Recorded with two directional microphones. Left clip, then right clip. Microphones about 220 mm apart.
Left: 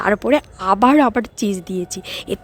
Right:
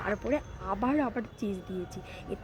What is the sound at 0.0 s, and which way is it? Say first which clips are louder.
A woman's voice: left 15 dB; 45° left (ahead or behind).